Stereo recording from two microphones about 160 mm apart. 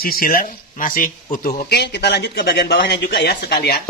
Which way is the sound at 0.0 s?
65° left (ahead or behind).